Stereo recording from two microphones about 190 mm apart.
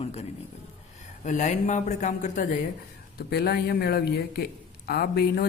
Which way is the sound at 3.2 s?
55° left (ahead or behind).